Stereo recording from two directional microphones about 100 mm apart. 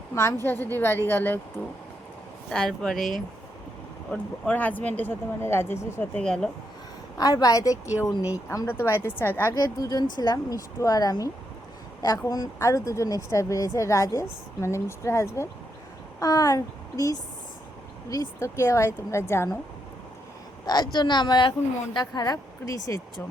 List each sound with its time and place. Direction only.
0.1 s a woman's voice: 30° left (ahead or behind)
2.5 s speech: 5° left (ahead or behind)
4.1 s speech: 15° left (ahead or behind)
6.1 s speech: 5° left (ahead or behind)
7.2 s a woman's voice: 40° left (ahead or behind); by 9.6 s 25° left (ahead or behind)
9.6 s a woman's voice: 35° left (ahead or behind)
20.7 s a woman's voice: 45° left (ahead or behind)